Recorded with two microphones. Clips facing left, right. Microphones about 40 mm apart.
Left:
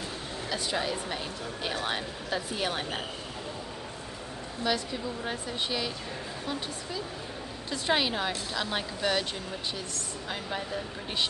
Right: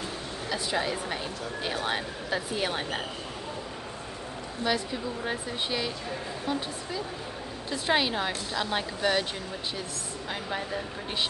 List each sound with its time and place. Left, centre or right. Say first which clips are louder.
0.5 s a woman's voice: right 2 dB; centre
4.6 s a woman's voice: right 1 dB; centre